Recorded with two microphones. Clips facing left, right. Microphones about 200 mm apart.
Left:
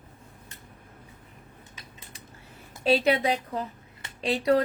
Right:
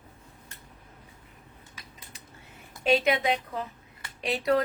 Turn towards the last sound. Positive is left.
turn(degrees=30)  # may be behind; listen again after turning